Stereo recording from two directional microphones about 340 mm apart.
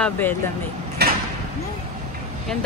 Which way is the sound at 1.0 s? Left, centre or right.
Right.